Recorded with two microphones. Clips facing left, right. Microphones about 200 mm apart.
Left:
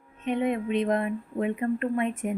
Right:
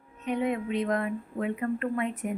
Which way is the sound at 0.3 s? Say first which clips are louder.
Left 2 dB; 20° left (ahead or behind).